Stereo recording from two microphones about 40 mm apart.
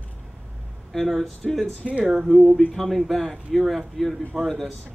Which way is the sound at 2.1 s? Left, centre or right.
Centre.